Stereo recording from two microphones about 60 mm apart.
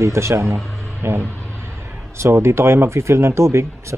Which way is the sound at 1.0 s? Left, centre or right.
Right.